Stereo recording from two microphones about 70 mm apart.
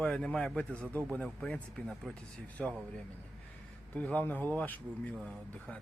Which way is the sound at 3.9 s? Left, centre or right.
Left.